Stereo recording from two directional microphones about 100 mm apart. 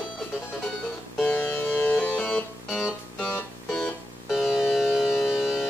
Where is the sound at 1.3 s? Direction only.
15° left (ahead or behind); by 5.7 s 5° right (ahead or behind).